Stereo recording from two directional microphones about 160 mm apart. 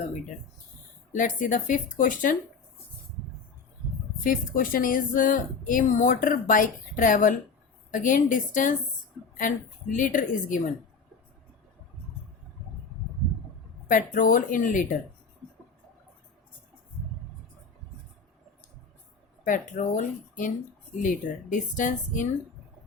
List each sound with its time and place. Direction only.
1.1 s a woman's voice: 55° left (ahead or behind)
4.2 s a woman's voice: 60° left (ahead or behind)
13.8 s a woman's voice: 55° left (ahead or behind)
19.5 s speech: 55° left (ahead or behind)